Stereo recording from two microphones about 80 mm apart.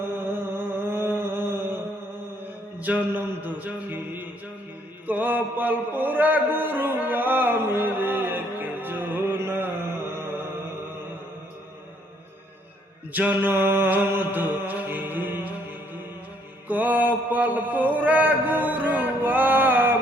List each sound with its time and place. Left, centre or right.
0.0 s music: right
5.0 s a sound: right
13.1 s music: right
16.6 s mantra: right